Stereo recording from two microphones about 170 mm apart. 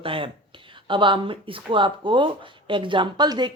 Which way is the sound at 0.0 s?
30° right (ahead or behind).